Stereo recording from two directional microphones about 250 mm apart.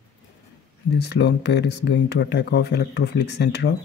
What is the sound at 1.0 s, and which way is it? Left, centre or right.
Speech, left.